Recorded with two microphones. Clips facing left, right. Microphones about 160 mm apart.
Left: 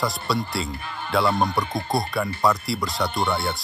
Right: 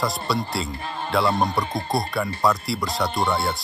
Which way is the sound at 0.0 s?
Centre (ahead or behind).